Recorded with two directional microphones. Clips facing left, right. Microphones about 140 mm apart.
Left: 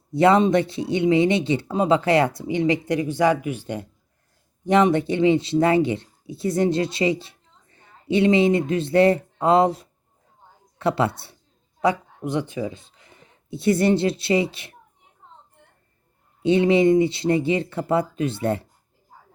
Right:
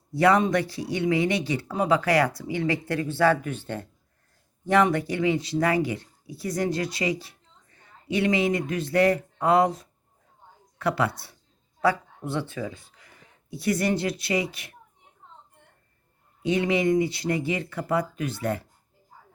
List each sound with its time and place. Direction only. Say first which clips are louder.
0.1 s speech: left 4 dB; 25° left (ahead or behind)
16.4 s speech: left 7 dB; 30° left (ahead or behind)